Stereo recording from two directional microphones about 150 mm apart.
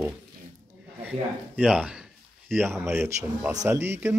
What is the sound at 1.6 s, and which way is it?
Speech, 10° right (ahead or behind).